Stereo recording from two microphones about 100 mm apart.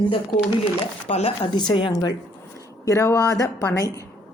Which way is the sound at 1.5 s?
55° left (ahead or behind).